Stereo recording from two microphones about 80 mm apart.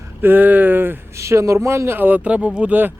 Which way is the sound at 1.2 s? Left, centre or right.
Right.